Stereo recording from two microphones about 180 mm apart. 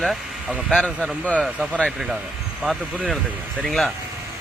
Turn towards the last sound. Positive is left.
turn(degrees=0)  # may be behind; listen again after turning